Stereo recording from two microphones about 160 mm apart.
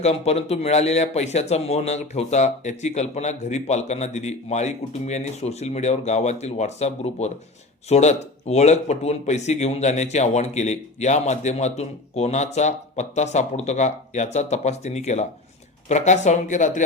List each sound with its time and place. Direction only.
0.0 s speech: 40° left (ahead or behind)